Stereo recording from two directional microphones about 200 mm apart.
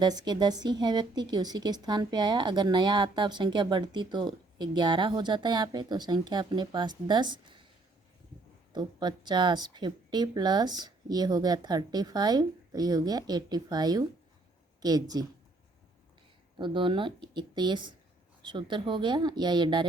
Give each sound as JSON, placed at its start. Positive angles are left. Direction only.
{"t": 0.0, "sound": "speech", "side_deg": -20}
{"t": 8.7, "sound": "speech", "side_deg": -20}
{"t": 16.6, "sound": "speech", "side_deg": -25}